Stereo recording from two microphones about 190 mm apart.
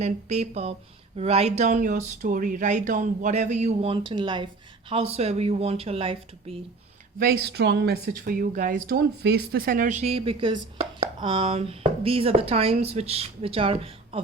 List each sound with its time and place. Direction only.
0.0 s speech: 35° right (ahead or behind)
7.2 s speech: 55° right (ahead or behind); by 14.2 s 30° right (ahead or behind)